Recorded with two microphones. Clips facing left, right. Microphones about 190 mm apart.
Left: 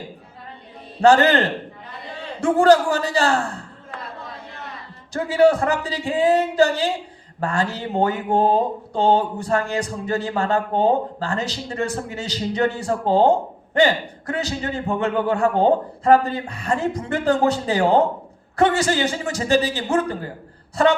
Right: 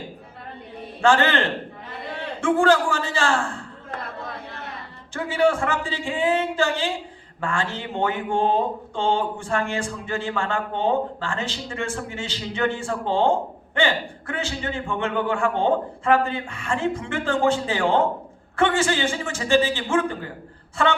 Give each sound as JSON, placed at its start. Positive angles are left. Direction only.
{"t": 1.0, "sound": "speech", "side_deg": 40}
{"t": 5.1, "sound": "speech", "side_deg": 40}